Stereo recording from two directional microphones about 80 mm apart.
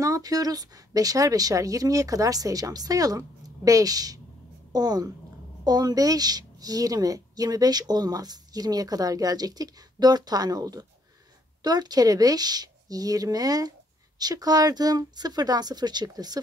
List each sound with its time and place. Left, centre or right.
0.0 s speech: right